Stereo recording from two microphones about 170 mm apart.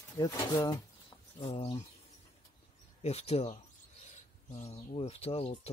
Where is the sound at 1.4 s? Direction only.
35° left (ahead or behind).